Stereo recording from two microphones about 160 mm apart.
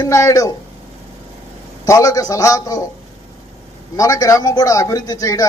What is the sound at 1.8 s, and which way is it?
A man's voice, 20° left (ahead or behind).